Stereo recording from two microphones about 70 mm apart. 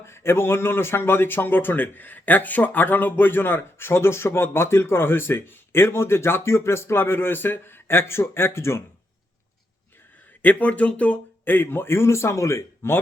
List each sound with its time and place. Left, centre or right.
0.0 s speech: left
10.4 s speech: left